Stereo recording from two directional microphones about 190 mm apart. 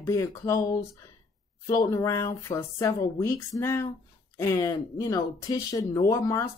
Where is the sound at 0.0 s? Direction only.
15° left (ahead or behind).